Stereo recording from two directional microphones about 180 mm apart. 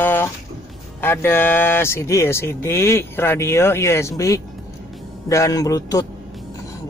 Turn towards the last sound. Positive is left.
turn(degrees=20)  # may be behind; listen again after turning